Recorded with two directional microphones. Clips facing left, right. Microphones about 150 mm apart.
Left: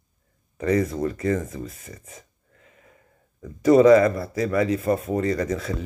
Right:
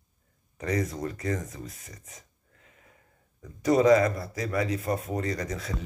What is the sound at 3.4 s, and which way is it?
Speech, 55° left (ahead or behind).